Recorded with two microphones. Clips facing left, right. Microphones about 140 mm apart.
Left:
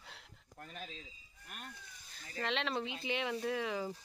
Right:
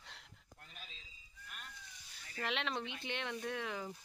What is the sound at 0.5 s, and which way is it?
Speech, 50° left (ahead or behind).